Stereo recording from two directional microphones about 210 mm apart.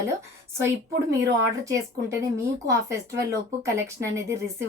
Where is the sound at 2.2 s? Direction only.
15° right (ahead or behind).